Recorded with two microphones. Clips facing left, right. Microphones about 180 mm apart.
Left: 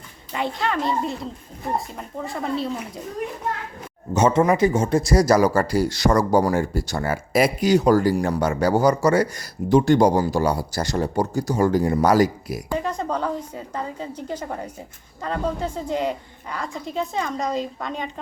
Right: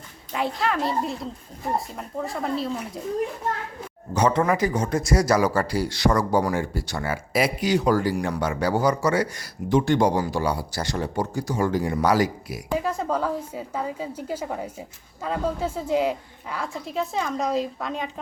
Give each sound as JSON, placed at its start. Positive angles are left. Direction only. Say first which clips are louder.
{"t": 0.3, "sound": "a woman's voice", "louder": "even", "side_deg": 0}
{"t": 4.1, "sound": "speech", "louder": "left 3 dB", "side_deg": 20}
{"t": 12.7, "sound": "a woman's voice", "louder": "right 1 dB", "side_deg": -5}